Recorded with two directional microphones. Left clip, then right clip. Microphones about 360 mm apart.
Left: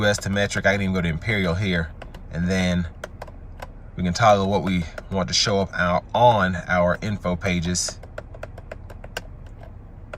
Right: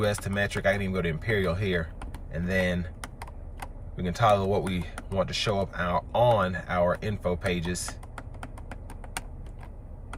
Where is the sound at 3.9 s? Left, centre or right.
Centre.